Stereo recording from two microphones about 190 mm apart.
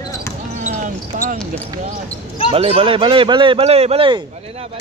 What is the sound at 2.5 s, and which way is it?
Speech, 30° right (ahead or behind).